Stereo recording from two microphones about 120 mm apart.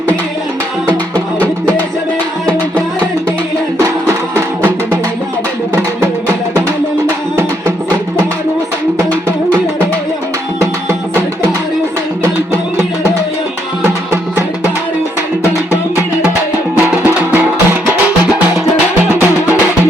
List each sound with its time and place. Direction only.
4.4 s music: 15° right (ahead or behind)
10.6 s music: 20° right (ahead or behind)
16.7 s music: 15° right (ahead or behind)